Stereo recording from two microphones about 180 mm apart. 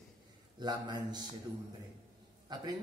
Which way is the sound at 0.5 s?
25° right (ahead or behind).